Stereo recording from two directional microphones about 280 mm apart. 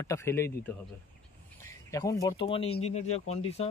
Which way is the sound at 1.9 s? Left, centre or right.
Centre.